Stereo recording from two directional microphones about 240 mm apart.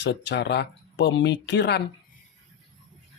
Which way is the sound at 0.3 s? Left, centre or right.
Left.